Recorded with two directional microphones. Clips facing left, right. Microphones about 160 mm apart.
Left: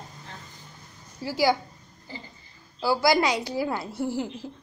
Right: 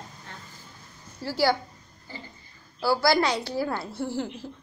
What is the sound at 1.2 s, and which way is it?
Speech, 15° left (ahead or behind).